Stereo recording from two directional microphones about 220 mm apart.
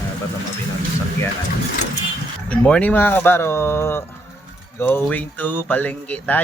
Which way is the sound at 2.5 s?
5° left (ahead or behind).